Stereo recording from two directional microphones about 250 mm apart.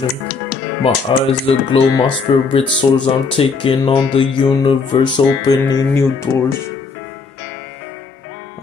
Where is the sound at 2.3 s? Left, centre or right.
Left.